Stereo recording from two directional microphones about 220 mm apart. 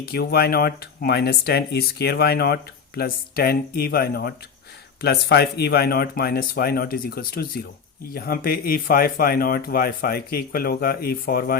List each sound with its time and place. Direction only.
0.0 s speech: 45° left (ahead or behind)